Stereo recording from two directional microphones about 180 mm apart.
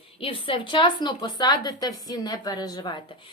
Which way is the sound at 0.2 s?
30° left (ahead or behind).